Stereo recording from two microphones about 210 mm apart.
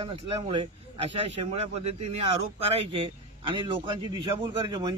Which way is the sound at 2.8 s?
25° right (ahead or behind).